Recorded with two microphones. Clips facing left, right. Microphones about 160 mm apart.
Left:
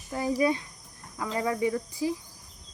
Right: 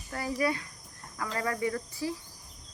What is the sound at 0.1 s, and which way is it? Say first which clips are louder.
Speech: left 5 dB; 20° left (ahead or behind).